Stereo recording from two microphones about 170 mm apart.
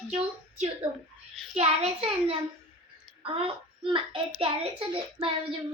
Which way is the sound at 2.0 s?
35° right (ahead or behind).